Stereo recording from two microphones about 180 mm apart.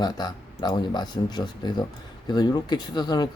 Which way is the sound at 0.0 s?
25° left (ahead or behind).